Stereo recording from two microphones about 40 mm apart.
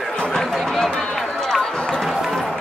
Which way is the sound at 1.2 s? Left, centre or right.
Centre.